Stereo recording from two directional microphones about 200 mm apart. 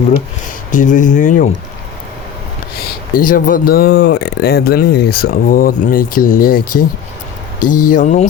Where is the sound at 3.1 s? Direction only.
45° left (ahead or behind).